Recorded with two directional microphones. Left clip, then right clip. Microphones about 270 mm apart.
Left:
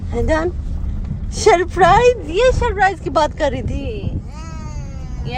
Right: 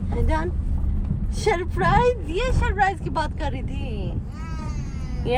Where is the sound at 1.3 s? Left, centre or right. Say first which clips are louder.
Left 10 dB; left.